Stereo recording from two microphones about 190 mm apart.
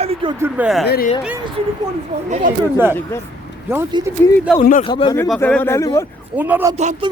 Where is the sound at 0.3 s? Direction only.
10° right (ahead or behind).